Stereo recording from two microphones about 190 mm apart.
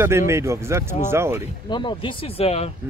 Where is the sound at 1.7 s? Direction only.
25° left (ahead or behind).